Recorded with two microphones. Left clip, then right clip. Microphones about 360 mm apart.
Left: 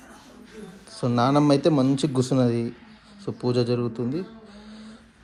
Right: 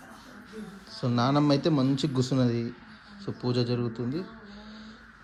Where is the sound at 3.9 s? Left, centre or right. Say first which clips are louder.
Left 4 dB; centre.